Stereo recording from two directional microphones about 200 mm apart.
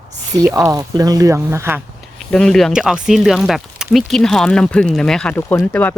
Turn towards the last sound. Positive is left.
turn(degrees=10)  # may be behind; listen again after turning